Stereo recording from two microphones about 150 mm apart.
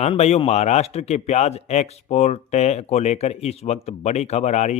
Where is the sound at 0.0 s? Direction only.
45° left (ahead or behind).